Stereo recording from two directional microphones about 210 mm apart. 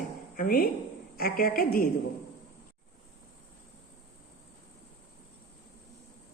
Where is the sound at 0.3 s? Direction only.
45° left (ahead or behind).